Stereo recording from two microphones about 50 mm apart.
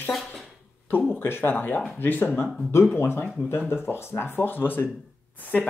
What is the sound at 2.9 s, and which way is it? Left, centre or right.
Speech, left.